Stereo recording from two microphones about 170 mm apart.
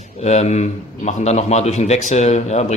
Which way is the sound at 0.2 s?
40° left (ahead or behind).